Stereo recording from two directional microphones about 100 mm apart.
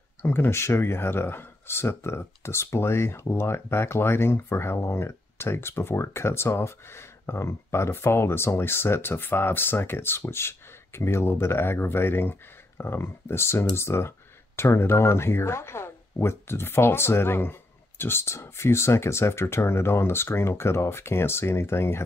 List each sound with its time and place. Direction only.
0.2 s speech: 20° left (ahead or behind)